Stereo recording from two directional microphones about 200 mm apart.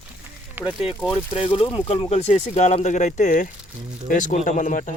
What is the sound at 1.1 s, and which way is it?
Speech, 25° left (ahead or behind).